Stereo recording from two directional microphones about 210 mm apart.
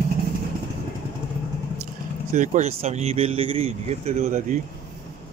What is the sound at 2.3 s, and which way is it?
Speech, 35° right (ahead or behind).